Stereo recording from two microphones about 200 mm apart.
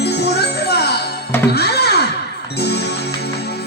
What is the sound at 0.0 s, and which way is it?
Music, 55° left (ahead or behind).